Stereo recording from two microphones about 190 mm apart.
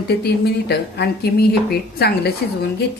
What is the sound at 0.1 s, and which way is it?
Speech, 60° left (ahead or behind).